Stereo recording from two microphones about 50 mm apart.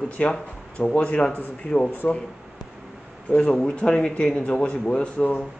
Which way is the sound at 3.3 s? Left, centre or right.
Left.